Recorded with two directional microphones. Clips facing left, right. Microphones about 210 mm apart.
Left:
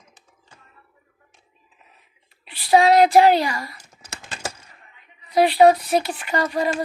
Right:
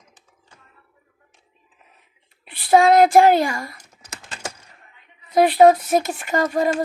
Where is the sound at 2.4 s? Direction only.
50° right (ahead or behind).